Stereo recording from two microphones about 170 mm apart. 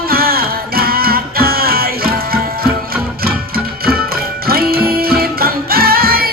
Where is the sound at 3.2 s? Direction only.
60° right (ahead or behind).